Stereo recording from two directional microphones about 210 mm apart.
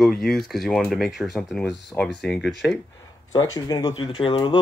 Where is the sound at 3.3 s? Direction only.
20° left (ahead or behind).